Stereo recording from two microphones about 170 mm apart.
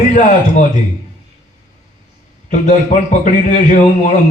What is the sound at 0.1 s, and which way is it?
Speech, 45° left (ahead or behind).